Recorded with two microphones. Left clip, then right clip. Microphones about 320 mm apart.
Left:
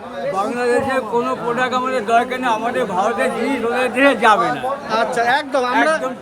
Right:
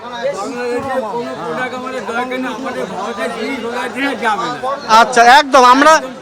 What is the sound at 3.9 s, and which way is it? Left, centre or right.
Speech, centre.